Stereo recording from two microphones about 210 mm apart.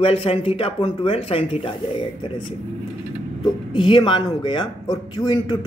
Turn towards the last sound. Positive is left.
turn(degrees=20)  # may be behind; listen again after turning